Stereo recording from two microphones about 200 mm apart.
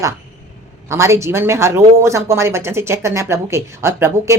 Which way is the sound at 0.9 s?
15° right (ahead or behind).